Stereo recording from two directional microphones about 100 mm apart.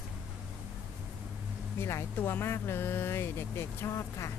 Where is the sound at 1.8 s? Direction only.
25° left (ahead or behind).